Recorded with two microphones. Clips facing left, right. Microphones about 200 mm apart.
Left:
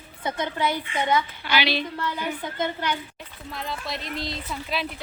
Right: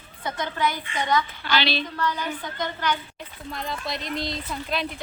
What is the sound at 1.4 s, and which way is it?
Speech, 10° left (ahead or behind).